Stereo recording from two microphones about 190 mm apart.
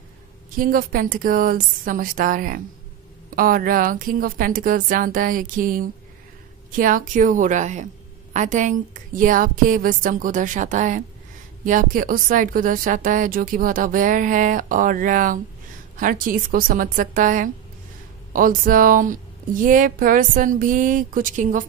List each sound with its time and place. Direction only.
0.6 s a woman's voice: 50° right (ahead or behind)